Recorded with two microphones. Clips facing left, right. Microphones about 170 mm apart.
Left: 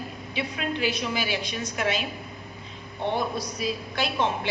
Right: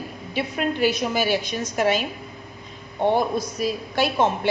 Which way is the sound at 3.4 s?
45° right (ahead or behind).